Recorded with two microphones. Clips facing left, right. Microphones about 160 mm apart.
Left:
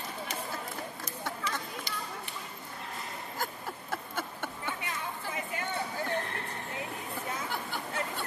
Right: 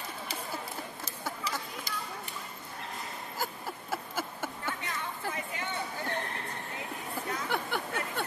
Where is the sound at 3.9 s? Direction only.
5° right (ahead or behind).